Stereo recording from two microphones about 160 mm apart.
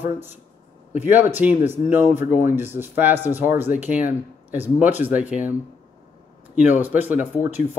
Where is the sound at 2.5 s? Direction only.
15° right (ahead or behind).